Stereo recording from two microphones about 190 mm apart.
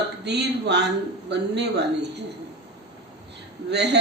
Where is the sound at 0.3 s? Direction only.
60° right (ahead or behind).